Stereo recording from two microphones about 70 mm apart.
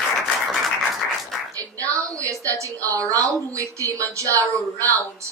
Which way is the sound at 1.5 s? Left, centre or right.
Right.